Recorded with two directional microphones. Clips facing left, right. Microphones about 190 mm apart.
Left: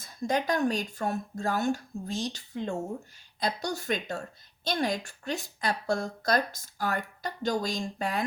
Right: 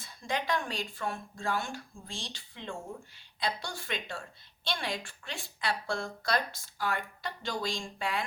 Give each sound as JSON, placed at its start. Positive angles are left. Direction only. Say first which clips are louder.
{"t": 0.0, "sound": "a woman's voice", "louder": "left 6 dB", "side_deg": 45}